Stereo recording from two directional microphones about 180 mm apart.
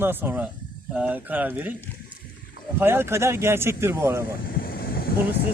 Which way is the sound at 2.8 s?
15° right (ahead or behind).